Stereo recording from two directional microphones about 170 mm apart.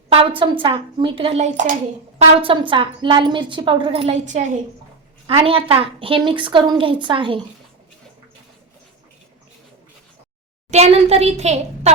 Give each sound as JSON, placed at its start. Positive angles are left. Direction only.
{"t": 0.1, "sound": "a woman's voice", "side_deg": -30}
{"t": 2.1, "sound": "a woman's voice", "side_deg": -35}
{"t": 5.2, "sound": "a woman's voice", "side_deg": -35}
{"t": 10.7, "sound": "a woman's voice", "side_deg": -40}